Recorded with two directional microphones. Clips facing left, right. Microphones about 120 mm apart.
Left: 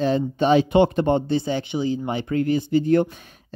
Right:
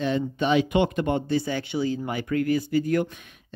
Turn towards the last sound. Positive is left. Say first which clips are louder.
# left 1 dB
turn(degrees=35)  # may be behind; listen again after turning